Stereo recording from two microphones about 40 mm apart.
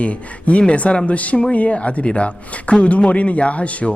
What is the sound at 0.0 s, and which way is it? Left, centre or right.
Speech, left.